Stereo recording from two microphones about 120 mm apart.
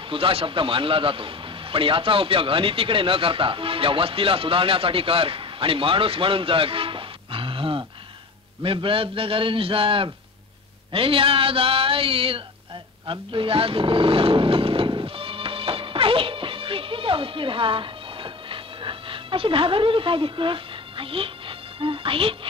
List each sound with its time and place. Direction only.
0.1 s a man's voice: 50° right (ahead or behind)
13.0 s roaring cats: 45° right (ahead or behind)